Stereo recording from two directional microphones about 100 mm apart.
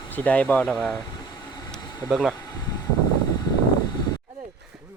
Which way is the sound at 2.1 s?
Centre (ahead or behind).